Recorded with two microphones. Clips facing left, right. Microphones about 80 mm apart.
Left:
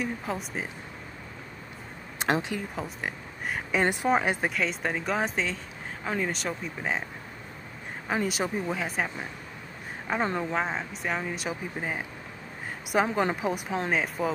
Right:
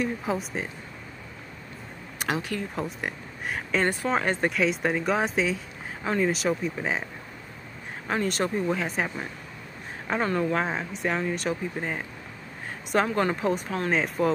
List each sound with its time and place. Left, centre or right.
0.0 s speech: centre
2.1 s a sound: left
2.7 s speech: centre
3.7 s speech: centre
4.5 s speech: centre
8.1 s speech: centre
10.2 s speech: centre
10.6 s speech: centre